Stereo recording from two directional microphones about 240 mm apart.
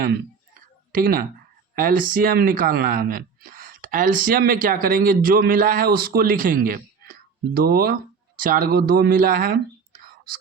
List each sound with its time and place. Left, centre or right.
0.9 s speech: right